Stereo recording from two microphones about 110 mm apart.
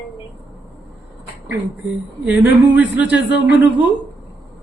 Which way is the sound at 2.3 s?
15° right (ahead or behind).